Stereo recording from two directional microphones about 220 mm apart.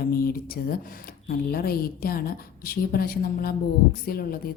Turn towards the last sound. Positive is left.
turn(degrees=45)  # may be behind; listen again after turning